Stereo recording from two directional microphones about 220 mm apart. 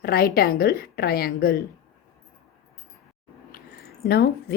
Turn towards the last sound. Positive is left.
turn(degrees=45)  # may be behind; listen again after turning